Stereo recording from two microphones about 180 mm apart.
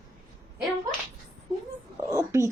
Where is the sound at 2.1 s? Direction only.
15° right (ahead or behind).